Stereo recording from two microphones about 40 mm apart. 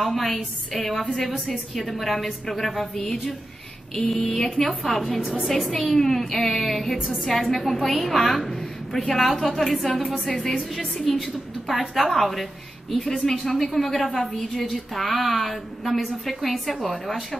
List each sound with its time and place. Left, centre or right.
0.0 s a woman's voice: centre
11.1 s a woman's voice: centre